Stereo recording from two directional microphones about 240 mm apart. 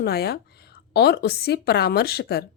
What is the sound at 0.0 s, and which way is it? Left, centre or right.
A woman's voice, left.